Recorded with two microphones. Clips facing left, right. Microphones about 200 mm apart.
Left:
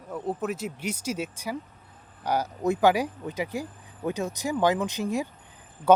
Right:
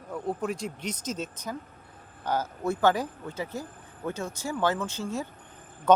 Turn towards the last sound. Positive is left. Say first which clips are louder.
# left 2 dB
turn(degrees=10)  # may be behind; listen again after turning